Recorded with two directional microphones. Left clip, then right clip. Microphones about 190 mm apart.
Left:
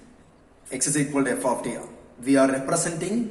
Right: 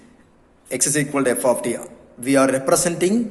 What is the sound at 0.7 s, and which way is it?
A man's voice, 50° right (ahead or behind).